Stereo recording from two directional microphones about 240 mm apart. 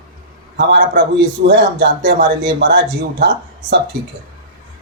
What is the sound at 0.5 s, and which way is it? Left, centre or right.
A man's voice, right.